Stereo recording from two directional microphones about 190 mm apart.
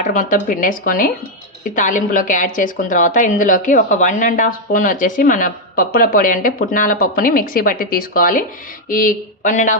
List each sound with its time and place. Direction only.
0.0 s a woman's voice: 45° left (ahead or behind)